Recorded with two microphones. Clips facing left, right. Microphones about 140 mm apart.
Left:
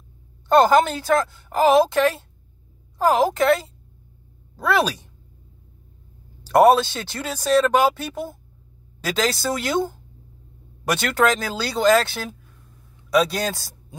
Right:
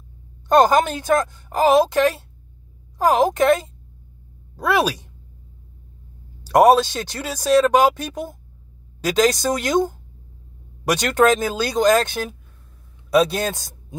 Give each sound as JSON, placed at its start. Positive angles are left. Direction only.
{"t": 0.5, "sound": "speech", "side_deg": -15}
{"t": 4.6, "sound": "speech", "side_deg": -10}
{"t": 6.4, "sound": "speech", "side_deg": -15}
{"t": 11.1, "sound": "speech", "side_deg": -20}
{"t": 13.3, "sound": "a man's voice", "side_deg": -20}